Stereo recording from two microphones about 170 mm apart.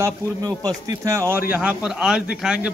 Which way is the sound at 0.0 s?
20° right (ahead or behind).